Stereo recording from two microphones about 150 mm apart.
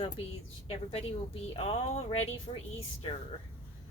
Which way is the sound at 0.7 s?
40° left (ahead or behind).